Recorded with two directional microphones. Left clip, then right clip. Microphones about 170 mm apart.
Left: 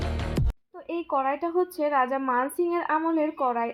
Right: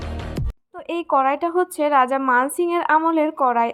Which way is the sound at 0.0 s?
Centre (ahead or behind).